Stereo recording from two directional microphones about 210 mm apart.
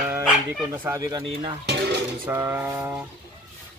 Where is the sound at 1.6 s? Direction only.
55° right (ahead or behind).